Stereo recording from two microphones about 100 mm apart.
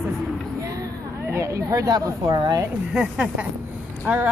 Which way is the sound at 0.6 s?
35° right (ahead or behind).